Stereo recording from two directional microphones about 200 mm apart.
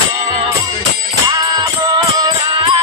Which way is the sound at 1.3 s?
20° right (ahead or behind).